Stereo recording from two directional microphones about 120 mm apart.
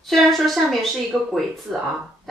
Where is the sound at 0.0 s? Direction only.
Centre (ahead or behind).